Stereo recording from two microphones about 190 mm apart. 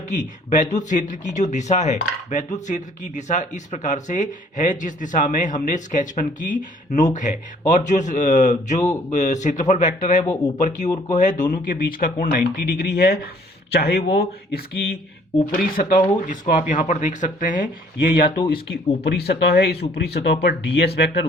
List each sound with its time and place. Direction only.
0.2 s speech: 40° left (ahead or behind); by 14.9 s 55° left (ahead or behind)
15.4 s speech: 45° left (ahead or behind)
18.3 s speech: 25° left (ahead or behind)
19.0 s speech: 60° left (ahead or behind)